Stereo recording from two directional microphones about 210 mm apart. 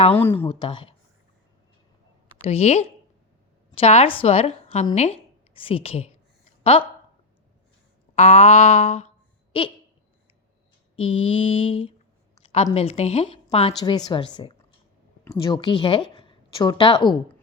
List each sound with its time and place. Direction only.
0.2 s a woman's voice: 10° left (ahead or behind)
0.4 s a woman's voice: 25° left (ahead or behind)
2.4 s a woman's voice: 30° left (ahead or behind)
8.1 s a sound: 30° left (ahead or behind)
10.9 s a woman's voice: 25° left (ahead or behind)